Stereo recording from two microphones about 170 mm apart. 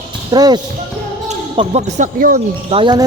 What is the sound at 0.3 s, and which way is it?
Speech, 25° right (ahead or behind).